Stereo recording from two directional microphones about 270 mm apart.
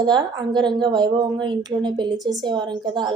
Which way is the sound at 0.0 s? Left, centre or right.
Centre.